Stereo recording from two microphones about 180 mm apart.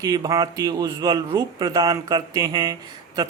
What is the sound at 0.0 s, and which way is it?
Speech, 20° right (ahead or behind).